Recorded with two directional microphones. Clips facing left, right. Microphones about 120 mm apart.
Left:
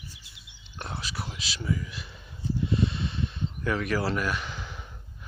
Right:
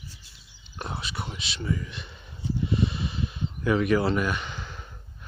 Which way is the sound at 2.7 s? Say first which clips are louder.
Right 1 dB; 5° right (ahead or behind).